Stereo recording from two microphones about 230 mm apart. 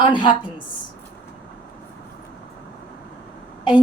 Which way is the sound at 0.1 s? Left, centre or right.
Left.